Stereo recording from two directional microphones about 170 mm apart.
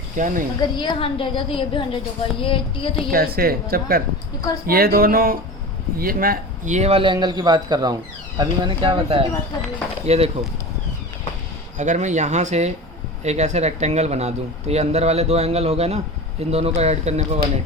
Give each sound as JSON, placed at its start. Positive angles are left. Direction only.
{"t": 0.2, "sound": "speech", "side_deg": -50}
{"t": 0.6, "sound": "a woman's voice", "side_deg": 25}
{"t": 3.1, "sound": "a woman's voice", "side_deg": -60}
{"t": 11.8, "sound": "speech", "side_deg": -45}